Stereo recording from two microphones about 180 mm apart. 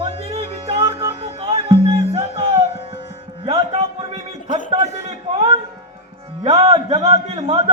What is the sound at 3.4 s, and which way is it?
Music, 35° right (ahead or behind).